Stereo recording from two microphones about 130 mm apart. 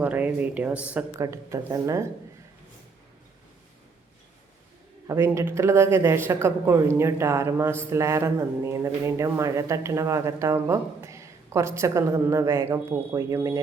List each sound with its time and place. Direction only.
0.0 s speech: 10° right (ahead or behind)
1.2 s speech: 25° right (ahead or behind)
5.0 s speech: 20° right (ahead or behind)